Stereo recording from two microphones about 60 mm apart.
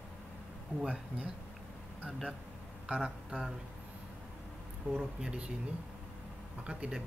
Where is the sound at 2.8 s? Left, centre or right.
Centre.